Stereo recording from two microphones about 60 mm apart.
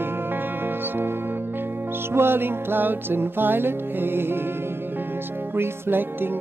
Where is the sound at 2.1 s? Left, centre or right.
Right.